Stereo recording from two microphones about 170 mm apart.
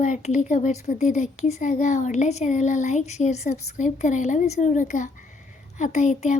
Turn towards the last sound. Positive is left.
turn(degrees=45)  # may be behind; listen again after turning